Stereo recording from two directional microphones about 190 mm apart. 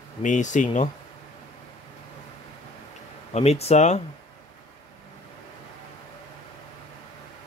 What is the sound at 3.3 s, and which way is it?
Speech, 35° left (ahead or behind).